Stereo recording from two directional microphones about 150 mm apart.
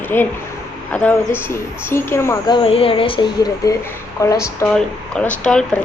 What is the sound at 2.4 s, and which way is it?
Speech, 35° left (ahead or behind).